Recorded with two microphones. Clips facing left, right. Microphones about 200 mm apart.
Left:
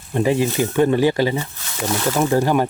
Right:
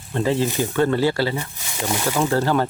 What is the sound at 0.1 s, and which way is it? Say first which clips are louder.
Speech: left 3 dB; 15° left (ahead or behind).